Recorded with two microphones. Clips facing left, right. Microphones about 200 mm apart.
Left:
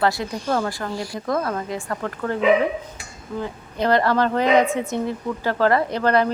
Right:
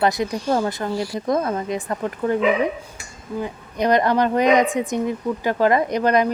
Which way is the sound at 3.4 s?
15° right (ahead or behind).